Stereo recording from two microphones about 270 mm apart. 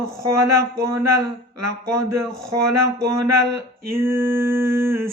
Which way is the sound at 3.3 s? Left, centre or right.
Right.